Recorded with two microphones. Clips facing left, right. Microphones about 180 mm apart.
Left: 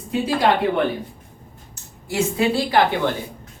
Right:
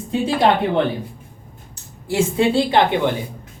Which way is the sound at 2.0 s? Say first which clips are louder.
Right 3 dB; 30° right (ahead or behind).